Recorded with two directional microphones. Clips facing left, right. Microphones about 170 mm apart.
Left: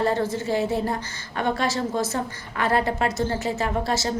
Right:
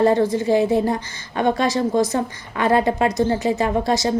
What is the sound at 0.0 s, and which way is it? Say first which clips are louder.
A woman's voice: right 7 dB; 15° right (ahead or behind).